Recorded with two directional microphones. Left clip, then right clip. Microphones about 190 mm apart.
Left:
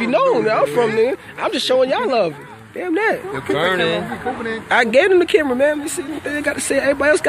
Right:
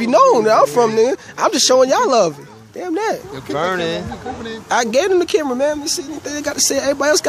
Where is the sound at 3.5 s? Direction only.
40° right (ahead or behind).